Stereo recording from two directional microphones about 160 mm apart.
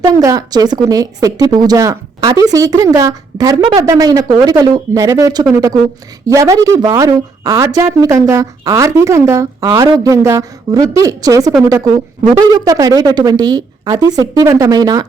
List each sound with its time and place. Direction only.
0.0 s a woman's voice: 20° right (ahead or behind)